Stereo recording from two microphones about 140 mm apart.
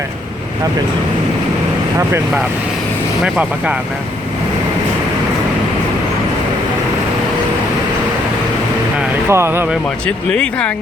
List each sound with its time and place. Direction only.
3.2 s speech: 5° right (ahead or behind)
9.3 s speech: 15° right (ahead or behind)
10.3 s speech: 5° left (ahead or behind)